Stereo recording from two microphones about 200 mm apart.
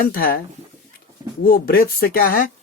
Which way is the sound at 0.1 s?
50° left (ahead or behind).